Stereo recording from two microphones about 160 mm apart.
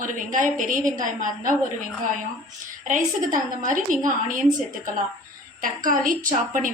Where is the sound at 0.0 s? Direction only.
55° right (ahead or behind).